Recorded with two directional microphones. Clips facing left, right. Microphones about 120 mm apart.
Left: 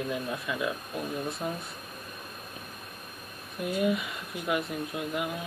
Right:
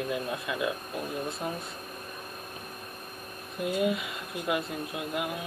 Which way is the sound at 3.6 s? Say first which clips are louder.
Even; 20° right (ahead or behind).